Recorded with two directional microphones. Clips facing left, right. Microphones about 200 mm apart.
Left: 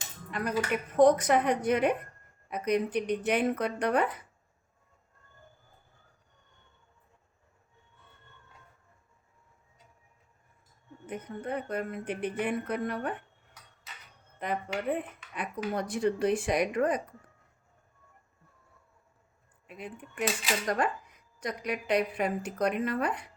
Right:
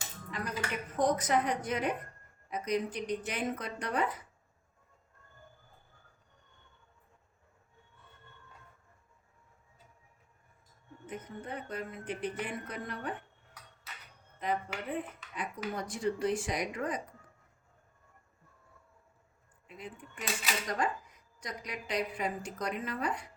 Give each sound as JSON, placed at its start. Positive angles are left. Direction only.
{"t": 0.3, "sound": "speech", "side_deg": 60}
{"t": 11.0, "sound": "speech", "side_deg": 60}
{"t": 14.3, "sound": "speech", "side_deg": 60}
{"t": 19.6, "sound": "speech", "side_deg": 60}